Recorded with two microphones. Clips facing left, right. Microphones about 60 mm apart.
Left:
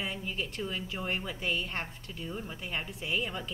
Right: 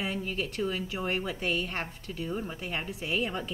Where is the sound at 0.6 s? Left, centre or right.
Centre.